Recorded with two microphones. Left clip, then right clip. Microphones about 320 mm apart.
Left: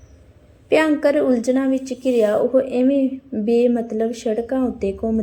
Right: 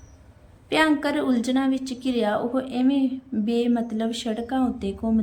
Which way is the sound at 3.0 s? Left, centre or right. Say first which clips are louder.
Left 4 dB; right.